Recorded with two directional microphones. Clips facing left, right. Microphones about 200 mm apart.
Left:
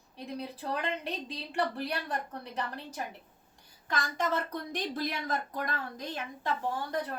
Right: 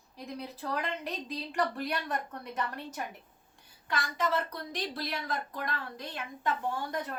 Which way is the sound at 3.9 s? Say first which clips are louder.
Even; 45° left (ahead or behind).